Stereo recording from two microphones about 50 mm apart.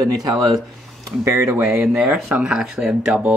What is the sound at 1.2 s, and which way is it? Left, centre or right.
Speech, right.